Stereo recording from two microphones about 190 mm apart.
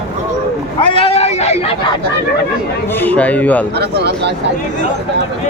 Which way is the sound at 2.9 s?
10° left (ahead or behind).